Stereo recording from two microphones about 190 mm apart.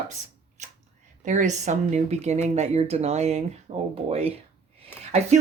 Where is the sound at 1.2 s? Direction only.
40° right (ahead or behind).